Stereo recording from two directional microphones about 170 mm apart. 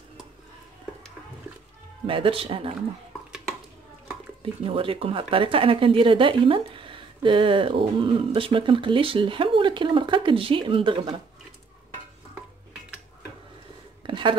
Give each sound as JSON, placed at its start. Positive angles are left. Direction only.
{"t": 2.0, "sound": "speech", "side_deg": -30}
{"t": 4.6, "sound": "speech", "side_deg": -30}
{"t": 14.0, "sound": "a sound", "side_deg": -30}